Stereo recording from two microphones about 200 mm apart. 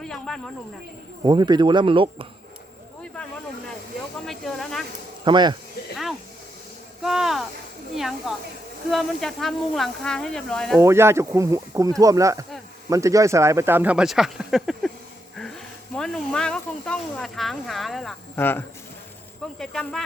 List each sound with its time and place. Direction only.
0.0 s a sound: 5° left (ahead or behind)
1.2 s speech: 20° right (ahead or behind)
4.3 s speech: centre (ahead or behind)
5.2 s speech: 20° right (ahead or behind)
7.0 s speech: centre (ahead or behind)
10.8 s speech: 10° right (ahead or behind)
16.0 s speech: 5° left (ahead or behind)
18.3 s speech: 10° left (ahead or behind)